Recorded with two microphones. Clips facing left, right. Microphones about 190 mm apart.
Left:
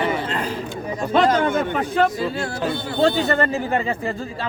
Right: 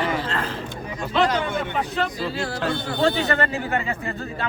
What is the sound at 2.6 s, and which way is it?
Speech, 10° left (ahead or behind).